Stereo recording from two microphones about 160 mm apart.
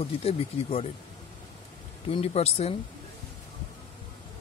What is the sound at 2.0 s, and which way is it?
Speech, 40° left (ahead or behind).